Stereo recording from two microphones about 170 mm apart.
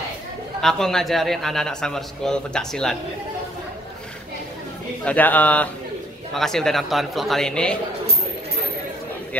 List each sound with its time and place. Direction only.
0.6 s a man's voice: 5° left (ahead or behind)
5.0 s a man's voice: 10° left (ahead or behind)